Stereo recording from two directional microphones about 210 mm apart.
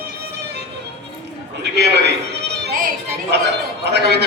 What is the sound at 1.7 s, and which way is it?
A man's voice, 55° right (ahead or behind).